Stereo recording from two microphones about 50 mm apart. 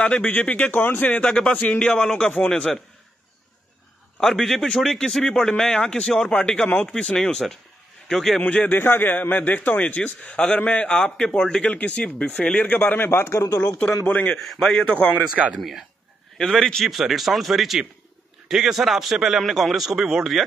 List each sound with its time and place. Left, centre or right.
0.0 s a man's voice: left
1.2 s a man's voice: centre
4.2 s a man's voice: centre
8.1 s a man's voice: centre
8.5 s a man's voice: left
8.7 s a man's voice: left
10.3 s a man's voice: left
13.3 s a man's voice: left
14.0 s a man's voice: left
14.4 s a man's voice: centre
16.5 s a man's voice: centre